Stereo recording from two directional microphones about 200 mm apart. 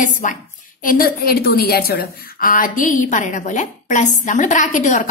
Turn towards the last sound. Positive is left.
turn(degrees=40)  # may be behind; listen again after turning